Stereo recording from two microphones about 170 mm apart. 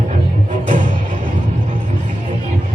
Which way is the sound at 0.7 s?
50° right (ahead or behind).